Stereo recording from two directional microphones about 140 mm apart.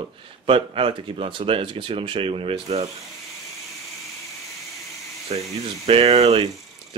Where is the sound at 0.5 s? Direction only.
40° right (ahead or behind).